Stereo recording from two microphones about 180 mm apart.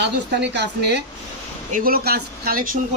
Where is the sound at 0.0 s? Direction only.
70° right (ahead or behind).